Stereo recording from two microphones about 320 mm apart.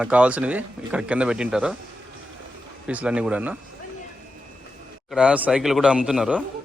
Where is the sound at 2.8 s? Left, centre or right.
Centre.